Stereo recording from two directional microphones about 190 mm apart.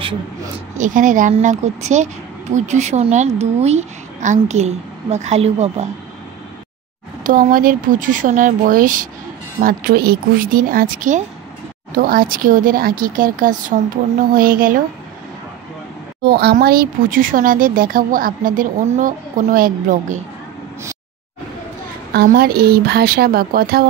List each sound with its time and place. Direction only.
0.7 s a woman's voice: 40° right (ahead or behind)
7.2 s speech: 45° right (ahead or behind)
16.2 s speech: 55° right (ahead or behind)
22.1 s speech: 55° right (ahead or behind)